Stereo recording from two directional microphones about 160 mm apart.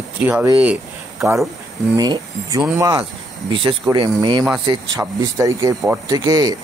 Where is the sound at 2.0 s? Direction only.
25° right (ahead or behind).